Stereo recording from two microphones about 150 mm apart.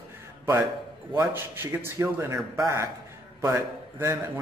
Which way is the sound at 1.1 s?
15° right (ahead or behind).